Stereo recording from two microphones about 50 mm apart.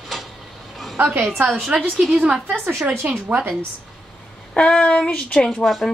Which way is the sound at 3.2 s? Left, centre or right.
Right.